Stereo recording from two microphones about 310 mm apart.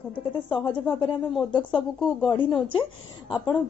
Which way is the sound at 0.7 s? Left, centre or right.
Centre.